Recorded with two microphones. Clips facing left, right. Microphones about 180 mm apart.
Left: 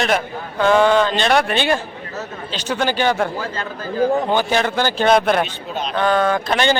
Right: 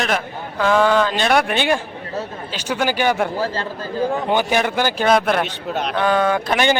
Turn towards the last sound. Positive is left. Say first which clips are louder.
# even
turn(degrees=-10)  # may be behind; listen again after turning